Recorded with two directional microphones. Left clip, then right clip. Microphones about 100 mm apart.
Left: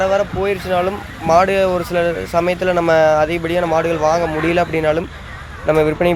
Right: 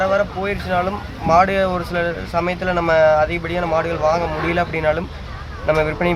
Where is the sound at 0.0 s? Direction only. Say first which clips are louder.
Left 2 dB; 35° left (ahead or behind).